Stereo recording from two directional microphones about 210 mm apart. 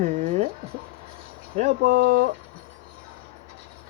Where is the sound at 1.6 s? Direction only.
35° right (ahead or behind).